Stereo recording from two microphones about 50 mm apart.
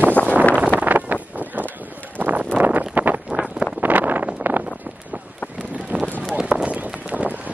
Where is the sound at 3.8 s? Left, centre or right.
Right.